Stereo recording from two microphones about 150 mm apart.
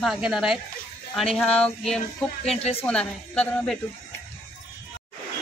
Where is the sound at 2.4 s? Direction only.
40° left (ahead or behind).